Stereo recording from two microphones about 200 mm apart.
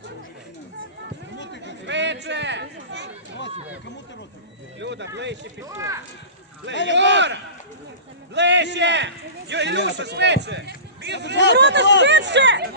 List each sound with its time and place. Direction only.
1.6 s chatter: 60° right (ahead or behind)
4.8 s speech: 60° right (ahead or behind)
5.7 s speech: 15° right (ahead or behind)
6.9 s a man's voice: 60° right (ahead or behind)